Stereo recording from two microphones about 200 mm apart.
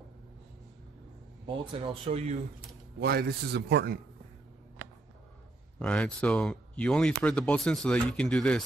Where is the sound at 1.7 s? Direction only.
25° right (ahead or behind).